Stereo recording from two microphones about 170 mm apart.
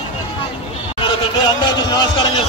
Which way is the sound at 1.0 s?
25° left (ahead or behind).